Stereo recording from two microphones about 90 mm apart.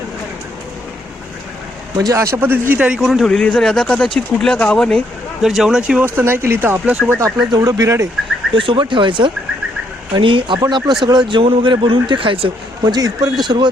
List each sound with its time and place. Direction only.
2.0 s speech: 35° right (ahead or behind)
2.7 s speech: 10° right (ahead or behind)
3.2 s speech: 10° left (ahead or behind)
5.4 s speech: 5° right (ahead or behind); by 6.9 s 25° right (ahead or behind)
7.5 s speech: 45° right (ahead or behind)
8.5 s speech: 70° right (ahead or behind)
10.7 s speech: 55° right (ahead or behind); by 12.5 s 70° right (ahead or behind)
12.8 s speech: 45° right (ahead or behind)